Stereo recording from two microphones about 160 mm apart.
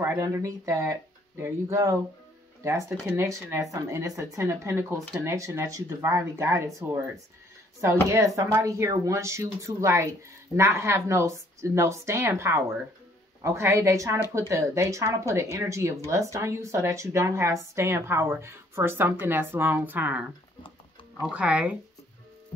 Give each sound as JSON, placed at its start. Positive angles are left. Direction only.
{"t": 0.0, "sound": "a woman's voice", "side_deg": -15}
{"t": 8.1, "sound": "a woman's voice", "side_deg": -20}